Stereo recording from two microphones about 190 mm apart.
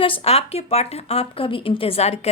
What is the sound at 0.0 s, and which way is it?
Speech, 30° left (ahead or behind).